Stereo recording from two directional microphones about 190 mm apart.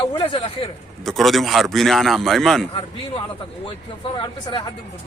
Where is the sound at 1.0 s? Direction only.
Centre (ahead or behind).